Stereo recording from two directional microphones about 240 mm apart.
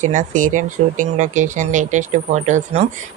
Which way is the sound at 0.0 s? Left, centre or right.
Right.